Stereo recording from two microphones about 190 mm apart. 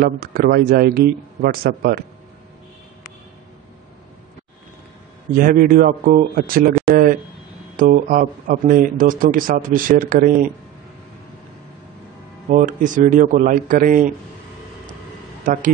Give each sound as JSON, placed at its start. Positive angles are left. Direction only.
{"t": 0.0, "sound": "speech", "side_deg": -50}
{"t": 5.3, "sound": "speech", "side_deg": -50}
{"t": 6.9, "sound": "a sound", "side_deg": -50}
{"t": 7.7, "sound": "speech", "side_deg": -45}
{"t": 12.4, "sound": "speech", "side_deg": -40}
{"t": 15.4, "sound": "speech", "side_deg": -45}